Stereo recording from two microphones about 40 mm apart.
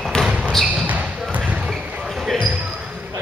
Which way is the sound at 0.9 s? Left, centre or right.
Right.